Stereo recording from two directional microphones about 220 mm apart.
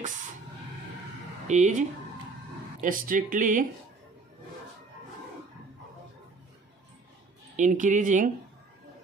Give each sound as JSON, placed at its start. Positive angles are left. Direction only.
{"t": 1.5, "sound": "speech", "side_deg": -35}
{"t": 7.5, "sound": "speech", "side_deg": -35}